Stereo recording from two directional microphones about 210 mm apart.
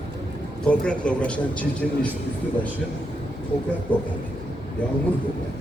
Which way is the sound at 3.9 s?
5° left (ahead or behind).